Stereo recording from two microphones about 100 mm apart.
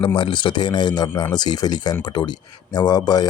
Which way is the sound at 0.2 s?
50° left (ahead or behind).